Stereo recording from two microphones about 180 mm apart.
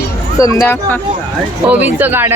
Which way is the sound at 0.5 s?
15° left (ahead or behind).